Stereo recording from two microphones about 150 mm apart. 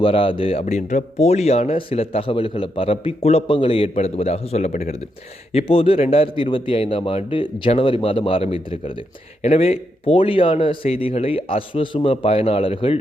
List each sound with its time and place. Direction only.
0.0 s speech: 35° left (ahead or behind)
0.6 s a man's voice: 50° left (ahead or behind)